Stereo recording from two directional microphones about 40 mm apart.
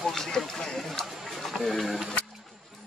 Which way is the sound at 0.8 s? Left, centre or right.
Centre.